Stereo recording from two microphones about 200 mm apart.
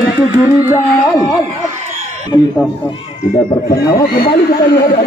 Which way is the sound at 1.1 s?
20° left (ahead or behind).